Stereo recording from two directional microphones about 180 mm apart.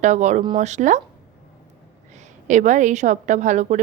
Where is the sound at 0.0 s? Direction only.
40° right (ahead or behind).